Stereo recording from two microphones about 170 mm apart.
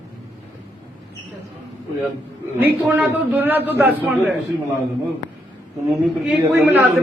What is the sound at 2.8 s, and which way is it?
A man's voice, 10° right (ahead or behind).